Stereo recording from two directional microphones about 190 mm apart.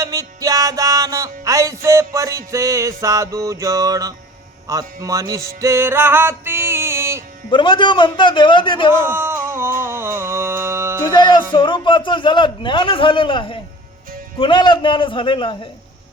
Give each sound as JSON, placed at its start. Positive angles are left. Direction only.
{"t": 0.0, "sound": "music", "side_deg": -15}
{"t": 7.5, "sound": "a man's voice", "side_deg": 25}
{"t": 8.9, "sound": "a sound", "side_deg": -15}
{"t": 9.8, "sound": "music", "side_deg": -15}
{"t": 11.1, "sound": "a man's voice", "side_deg": 25}